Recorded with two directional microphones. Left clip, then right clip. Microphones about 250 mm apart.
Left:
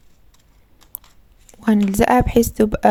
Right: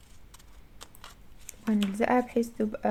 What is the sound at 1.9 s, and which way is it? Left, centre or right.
Speech, left.